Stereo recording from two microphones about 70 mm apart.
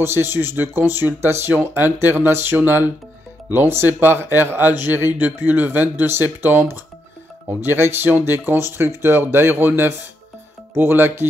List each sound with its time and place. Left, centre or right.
0.0 s speech: right